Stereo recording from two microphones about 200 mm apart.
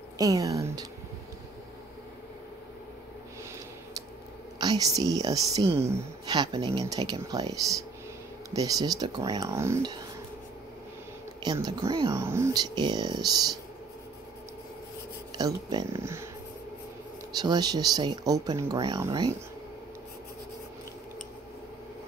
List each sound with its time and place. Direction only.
0.2 s speech: 15° right (ahead or behind)
4.6 s speech: 20° right (ahead or behind)
11.4 s speech: 20° right (ahead or behind)
15.3 s speech: 20° right (ahead or behind)
17.4 s speech: 20° right (ahead or behind)